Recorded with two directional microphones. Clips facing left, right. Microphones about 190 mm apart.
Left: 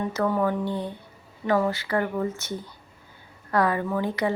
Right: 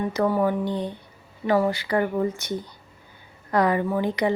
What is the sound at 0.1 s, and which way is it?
A woman's voice, 10° right (ahead or behind).